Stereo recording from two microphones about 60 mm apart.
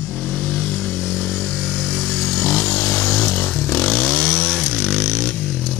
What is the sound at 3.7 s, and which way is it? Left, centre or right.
Chainsaw, centre.